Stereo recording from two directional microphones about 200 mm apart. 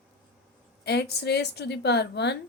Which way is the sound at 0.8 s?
55° left (ahead or behind).